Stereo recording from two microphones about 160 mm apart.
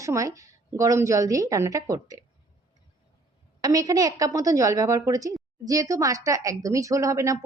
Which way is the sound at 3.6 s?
20° right (ahead or behind).